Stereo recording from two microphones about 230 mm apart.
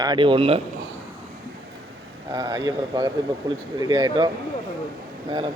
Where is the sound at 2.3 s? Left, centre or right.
Centre.